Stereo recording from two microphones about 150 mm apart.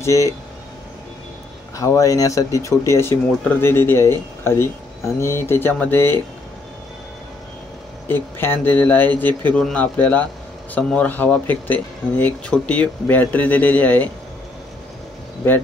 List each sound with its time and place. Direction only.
0.0 s speech: 20° left (ahead or behind)
1.8 s speech: 20° left (ahead or behind)
8.1 s speech: 15° left (ahead or behind)